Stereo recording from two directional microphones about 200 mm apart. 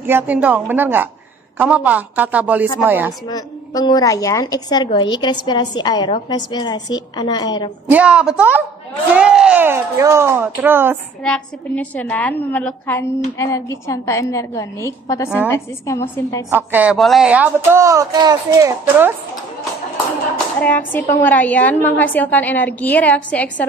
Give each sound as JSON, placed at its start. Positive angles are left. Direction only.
{"t": 0.0, "sound": "speech", "side_deg": -10}
{"t": 3.3, "sound": "a woman's voice", "side_deg": 20}
{"t": 7.9, "sound": "a woman's voice", "side_deg": -5}
{"t": 11.2, "sound": "a woman's voice", "side_deg": 5}
{"t": 16.4, "sound": "speech", "side_deg": -10}
{"t": 20.6, "sound": "a woman's voice", "side_deg": 10}